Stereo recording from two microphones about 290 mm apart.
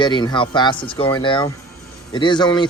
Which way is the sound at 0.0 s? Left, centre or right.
Centre.